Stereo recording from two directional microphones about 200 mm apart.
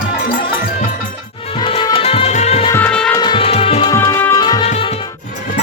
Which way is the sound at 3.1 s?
20° left (ahead or behind).